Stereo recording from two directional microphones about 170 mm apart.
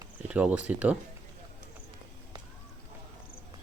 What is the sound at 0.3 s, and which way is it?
Speech, 10° right (ahead or behind).